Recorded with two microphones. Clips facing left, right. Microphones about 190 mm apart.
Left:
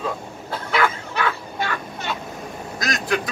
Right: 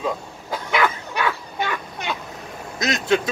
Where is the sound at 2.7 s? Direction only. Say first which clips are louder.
Right 4 dB; 25° right (ahead or behind).